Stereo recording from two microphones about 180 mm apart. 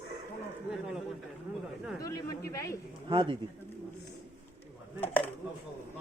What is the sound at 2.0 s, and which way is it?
Speech, 15° left (ahead or behind).